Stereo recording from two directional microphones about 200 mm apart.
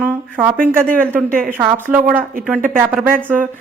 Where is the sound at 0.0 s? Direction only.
10° right (ahead or behind).